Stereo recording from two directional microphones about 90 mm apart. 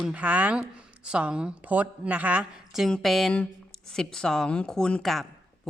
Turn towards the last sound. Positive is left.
turn(degrees=0)  # may be behind; listen again after turning